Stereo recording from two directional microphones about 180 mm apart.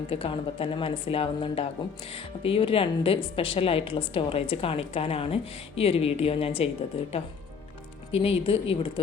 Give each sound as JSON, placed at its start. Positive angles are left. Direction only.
{"t": 0.1, "sound": "speech", "side_deg": 30}
{"t": 8.1, "sound": "speech", "side_deg": 30}